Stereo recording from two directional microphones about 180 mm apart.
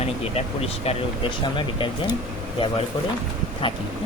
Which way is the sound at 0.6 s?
35° left (ahead or behind).